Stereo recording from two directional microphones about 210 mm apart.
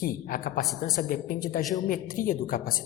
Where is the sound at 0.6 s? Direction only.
Centre (ahead or behind).